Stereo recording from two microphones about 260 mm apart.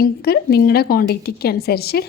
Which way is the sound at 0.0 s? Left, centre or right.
Left.